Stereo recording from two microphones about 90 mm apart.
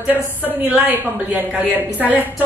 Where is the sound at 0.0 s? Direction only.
20° right (ahead or behind).